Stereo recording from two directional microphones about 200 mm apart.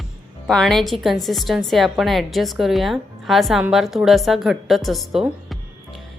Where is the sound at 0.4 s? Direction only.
Centre (ahead or behind).